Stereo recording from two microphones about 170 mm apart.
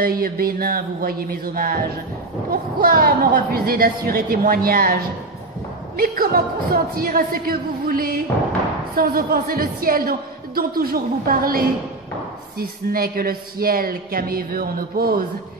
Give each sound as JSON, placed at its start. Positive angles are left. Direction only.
{"t": 0.0, "sound": "a woman's voice", "side_deg": -60}
{"t": 5.9, "sound": "a woman's voice", "side_deg": -60}